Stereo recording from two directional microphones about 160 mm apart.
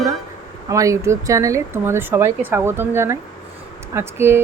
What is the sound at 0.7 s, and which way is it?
Speech, 20° right (ahead or behind).